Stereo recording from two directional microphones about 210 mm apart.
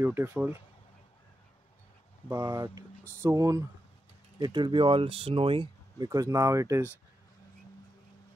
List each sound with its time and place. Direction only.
0.0 s speech: 10° right (ahead or behind)
2.2 s speech: 15° right (ahead or behind)